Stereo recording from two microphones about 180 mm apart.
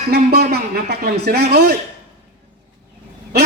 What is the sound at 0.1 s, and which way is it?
A man's voice, 60° right (ahead or behind).